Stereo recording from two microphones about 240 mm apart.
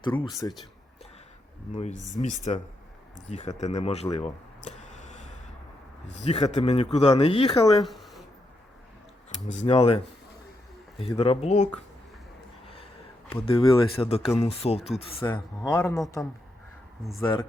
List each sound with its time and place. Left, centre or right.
0.2 s speech: centre
2.1 s speech: left
3.6 s a sound: left
6.1 s speech: left
7.6 s speech: centre
7.9 s a sound: centre
9.5 s speech: left
13.3 s speech: left
15.3 s speech: centre
17.2 s speech: centre